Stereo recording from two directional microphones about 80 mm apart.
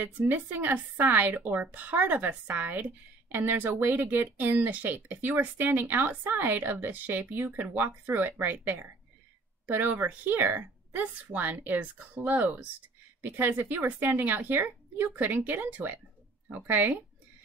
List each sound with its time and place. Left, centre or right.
0.0 s speech: right